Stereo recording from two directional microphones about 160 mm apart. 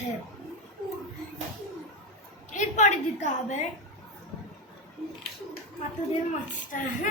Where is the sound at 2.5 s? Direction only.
50° left (ahead or behind).